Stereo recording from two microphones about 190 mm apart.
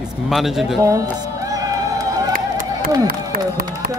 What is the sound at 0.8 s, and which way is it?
Music, 15° right (ahead or behind).